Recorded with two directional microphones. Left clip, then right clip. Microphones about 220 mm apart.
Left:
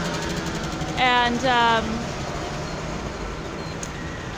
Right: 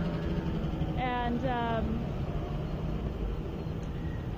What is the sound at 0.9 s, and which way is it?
Speech, 25° left (ahead or behind).